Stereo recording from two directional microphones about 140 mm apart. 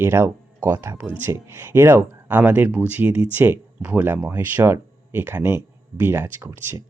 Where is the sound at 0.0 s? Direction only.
15° right (ahead or behind).